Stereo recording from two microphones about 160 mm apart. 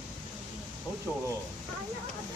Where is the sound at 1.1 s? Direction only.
10° left (ahead or behind).